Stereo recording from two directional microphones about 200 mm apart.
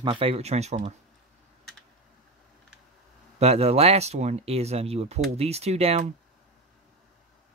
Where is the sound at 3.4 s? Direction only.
30° right (ahead or behind).